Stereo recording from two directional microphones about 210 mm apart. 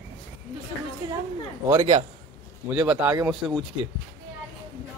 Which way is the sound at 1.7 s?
20° right (ahead or behind).